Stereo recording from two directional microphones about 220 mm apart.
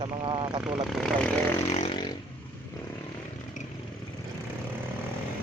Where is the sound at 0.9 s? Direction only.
Centre (ahead or behind).